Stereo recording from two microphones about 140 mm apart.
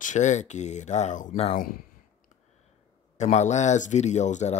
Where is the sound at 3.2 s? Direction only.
55° left (ahead or behind).